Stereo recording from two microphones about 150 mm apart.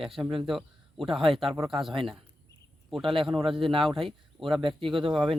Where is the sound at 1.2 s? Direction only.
35° right (ahead or behind).